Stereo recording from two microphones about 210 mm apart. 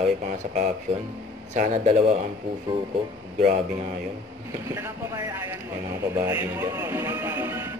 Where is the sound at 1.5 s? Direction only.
40° right (ahead or behind).